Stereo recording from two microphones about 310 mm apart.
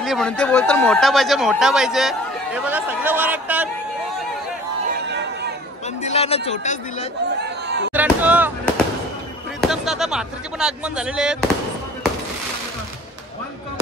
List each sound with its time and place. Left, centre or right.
0.0 s speech: centre
4.9 s a sound: right
6.0 s a man's voice: centre
7.3 s chatter: right
7.9 s speech: centre
9.6 s speech: centre